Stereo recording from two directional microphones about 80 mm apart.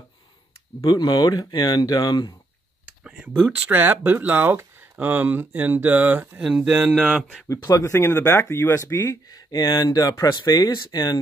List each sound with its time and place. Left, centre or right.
0.8 s speech: left
3.0 s speech: centre
6.4 s speech: centre
7.4 s speech: left
9.3 s speech: left